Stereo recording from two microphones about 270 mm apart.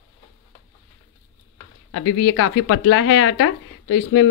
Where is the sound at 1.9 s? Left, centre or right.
Left.